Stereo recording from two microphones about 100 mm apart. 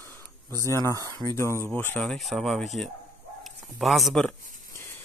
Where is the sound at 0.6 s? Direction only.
25° left (ahead or behind).